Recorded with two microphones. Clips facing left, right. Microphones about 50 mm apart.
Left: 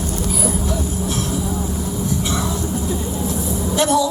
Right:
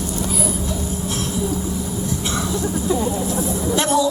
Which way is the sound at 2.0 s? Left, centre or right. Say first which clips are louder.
Left 3 dB; right.